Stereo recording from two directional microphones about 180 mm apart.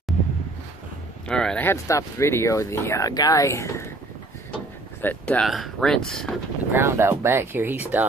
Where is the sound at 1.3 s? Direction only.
5° left (ahead or behind).